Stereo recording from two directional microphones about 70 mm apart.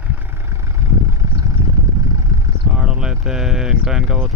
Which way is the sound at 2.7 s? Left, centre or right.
Centre.